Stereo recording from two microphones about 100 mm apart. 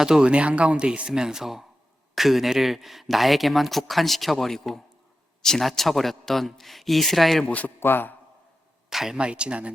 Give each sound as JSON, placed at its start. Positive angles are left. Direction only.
{"t": 0.0, "sound": "speech", "side_deg": -10}
{"t": 7.5, "sound": "a man's voice", "side_deg": 20}
{"t": 8.9, "sound": "speech", "side_deg": -5}